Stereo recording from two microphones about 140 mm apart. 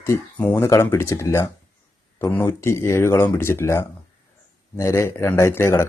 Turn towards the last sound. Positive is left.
turn(degrees=20)  # may be behind; listen again after turning